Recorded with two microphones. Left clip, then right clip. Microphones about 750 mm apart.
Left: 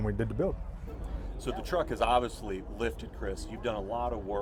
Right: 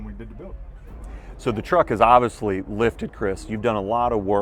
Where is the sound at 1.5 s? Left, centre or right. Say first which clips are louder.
Right 12 dB; right.